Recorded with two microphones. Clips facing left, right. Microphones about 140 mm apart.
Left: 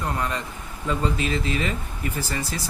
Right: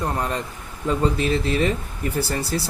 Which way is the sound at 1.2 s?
45° right (ahead or behind).